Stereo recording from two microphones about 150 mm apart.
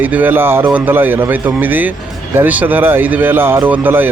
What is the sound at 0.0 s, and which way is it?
A man's voice, 10° right (ahead or behind).